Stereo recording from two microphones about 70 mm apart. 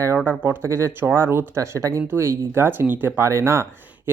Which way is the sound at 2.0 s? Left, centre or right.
Right.